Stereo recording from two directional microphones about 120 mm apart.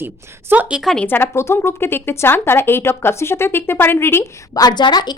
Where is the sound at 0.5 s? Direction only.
15° right (ahead or behind).